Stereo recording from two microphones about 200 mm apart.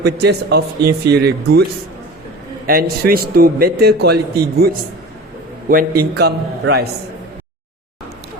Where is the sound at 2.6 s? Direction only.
50° right (ahead or behind).